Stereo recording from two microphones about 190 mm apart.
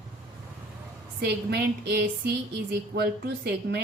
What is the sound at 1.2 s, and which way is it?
A woman's voice, 60° right (ahead or behind).